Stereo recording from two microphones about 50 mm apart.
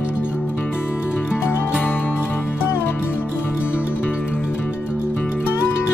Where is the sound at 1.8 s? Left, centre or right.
Left.